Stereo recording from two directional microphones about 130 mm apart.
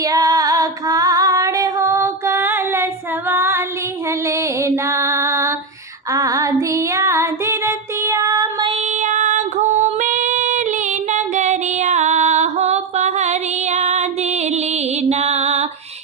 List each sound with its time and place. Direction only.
0.0 s female singing: 30° right (ahead or behind)
4.3 s music: 25° right (ahead or behind)
6.1 s female singing: 25° right (ahead or behind)
8.6 s female singing: 55° right (ahead or behind)